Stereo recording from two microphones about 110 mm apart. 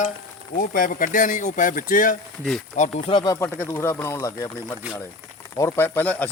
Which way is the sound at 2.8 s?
90° left.